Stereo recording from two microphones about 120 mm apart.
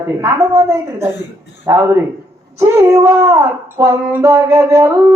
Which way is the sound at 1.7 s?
25° right (ahead or behind).